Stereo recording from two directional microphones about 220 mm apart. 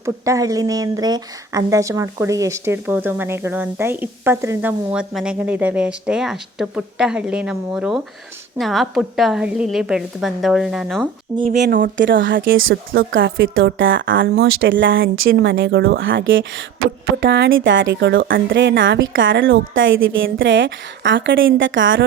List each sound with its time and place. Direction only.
0.0 s a woman's voice: 15° right (ahead or behind); by 11.1 s centre (ahead or behind)
11.4 s speech: 45° right (ahead or behind)
11.9 s a woman's voice: 55° right (ahead or behind)